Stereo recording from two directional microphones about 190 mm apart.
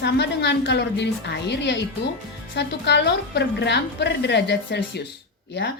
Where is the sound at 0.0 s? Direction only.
65° left (ahead or behind).